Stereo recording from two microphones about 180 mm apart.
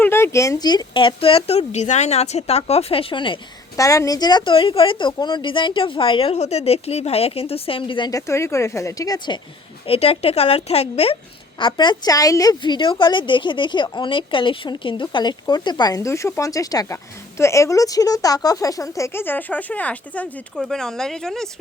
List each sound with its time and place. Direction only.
0.0 s a woman's voice: 15° left (ahead or behind)